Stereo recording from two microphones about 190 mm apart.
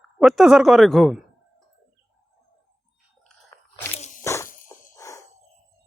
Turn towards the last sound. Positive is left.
turn(degrees=15)  # may be behind; listen again after turning